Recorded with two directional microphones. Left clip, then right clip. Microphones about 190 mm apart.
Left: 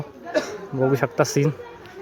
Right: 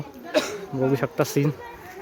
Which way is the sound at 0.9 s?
Centre (ahead or behind).